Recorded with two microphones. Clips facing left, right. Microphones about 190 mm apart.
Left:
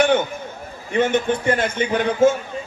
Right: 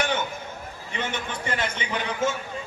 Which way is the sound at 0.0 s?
55° left (ahead or behind).